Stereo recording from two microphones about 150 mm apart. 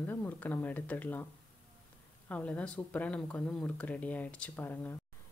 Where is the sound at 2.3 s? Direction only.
10° left (ahead or behind).